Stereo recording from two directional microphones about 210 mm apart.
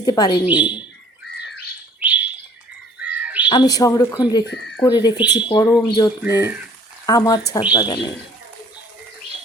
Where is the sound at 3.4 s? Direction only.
20° left (ahead or behind).